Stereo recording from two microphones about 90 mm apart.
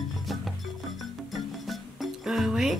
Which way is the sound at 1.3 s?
Centre (ahead or behind).